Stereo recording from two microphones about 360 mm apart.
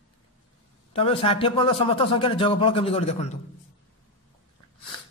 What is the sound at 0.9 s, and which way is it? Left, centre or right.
A man's voice, centre.